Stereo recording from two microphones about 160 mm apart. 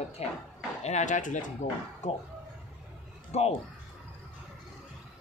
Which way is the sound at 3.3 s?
40° left (ahead or behind).